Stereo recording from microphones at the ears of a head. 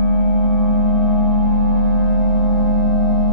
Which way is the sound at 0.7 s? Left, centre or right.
Left.